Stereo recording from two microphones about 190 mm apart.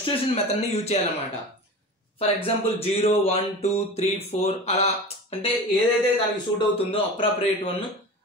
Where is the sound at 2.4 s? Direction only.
30° left (ahead or behind).